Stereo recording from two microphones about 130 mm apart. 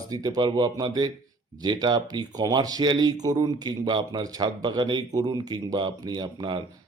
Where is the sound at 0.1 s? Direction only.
30° right (ahead or behind).